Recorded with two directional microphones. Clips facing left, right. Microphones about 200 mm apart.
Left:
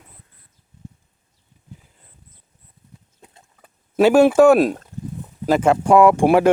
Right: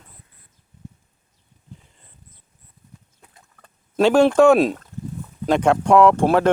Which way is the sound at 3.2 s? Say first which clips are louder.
Left 4 dB; 25° left (ahead or behind).